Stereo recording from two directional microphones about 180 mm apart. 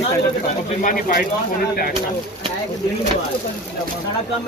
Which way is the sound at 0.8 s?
45° left (ahead or behind).